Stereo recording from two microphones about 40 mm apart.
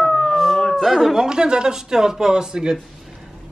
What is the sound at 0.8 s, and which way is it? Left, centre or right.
Speech, centre.